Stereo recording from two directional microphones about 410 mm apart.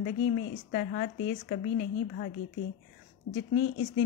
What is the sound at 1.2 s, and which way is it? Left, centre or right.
A woman's voice, left.